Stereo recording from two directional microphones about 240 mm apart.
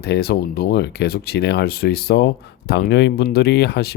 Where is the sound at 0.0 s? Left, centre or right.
Left.